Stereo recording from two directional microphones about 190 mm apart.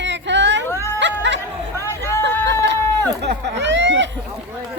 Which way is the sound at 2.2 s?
65° right (ahead or behind).